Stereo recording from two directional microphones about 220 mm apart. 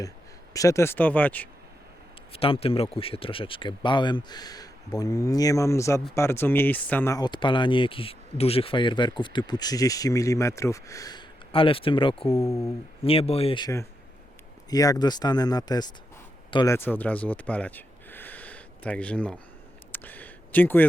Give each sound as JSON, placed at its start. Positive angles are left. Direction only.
{"t": 0.5, "sound": "speech", "side_deg": 15}
{"t": 2.3, "sound": "speech", "side_deg": 25}
{"t": 12.4, "sound": "speech", "side_deg": 10}
{"t": 13.0, "sound": "speech", "side_deg": 25}
{"t": 16.7, "sound": "speech", "side_deg": 10}
{"t": 19.9, "sound": "a sound", "side_deg": 10}